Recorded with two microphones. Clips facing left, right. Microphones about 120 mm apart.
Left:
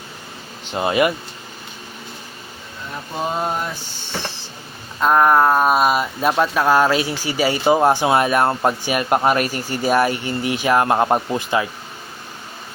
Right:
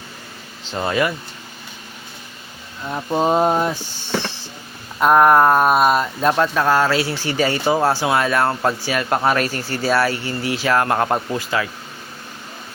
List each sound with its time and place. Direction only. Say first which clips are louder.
0.7 s speech: left 2 dB; 20° left (ahead or behind)
3.2 s a sound: right 6 dB; 35° right (ahead or behind)
4.9 s speech: right 2 dB; 5° right (ahead or behind); by 11.7 s 20° left (ahead or behind)